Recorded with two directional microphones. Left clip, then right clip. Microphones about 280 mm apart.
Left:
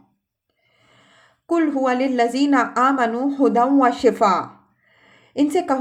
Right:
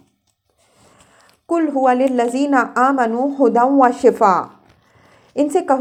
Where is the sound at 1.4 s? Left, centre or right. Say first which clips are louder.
Right 4 dB; centre.